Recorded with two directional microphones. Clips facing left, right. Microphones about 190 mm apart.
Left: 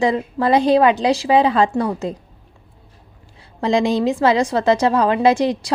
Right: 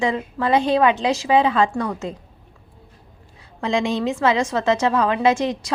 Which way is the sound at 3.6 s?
35° left (ahead or behind).